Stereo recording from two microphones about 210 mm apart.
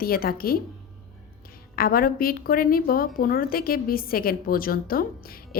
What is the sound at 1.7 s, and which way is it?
A woman's voice, 45° left (ahead or behind).